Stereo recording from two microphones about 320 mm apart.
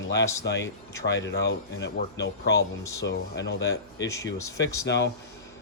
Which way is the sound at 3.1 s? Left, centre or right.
Left.